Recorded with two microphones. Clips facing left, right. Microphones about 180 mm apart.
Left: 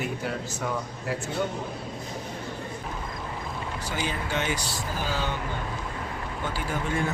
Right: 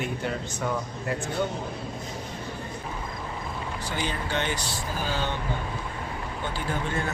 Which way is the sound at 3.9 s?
5° left (ahead or behind).